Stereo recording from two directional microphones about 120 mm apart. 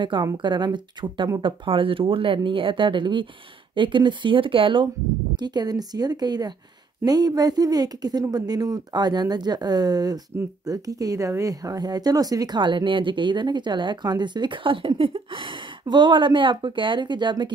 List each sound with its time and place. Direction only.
0.0 s speech: 40° right (ahead or behind)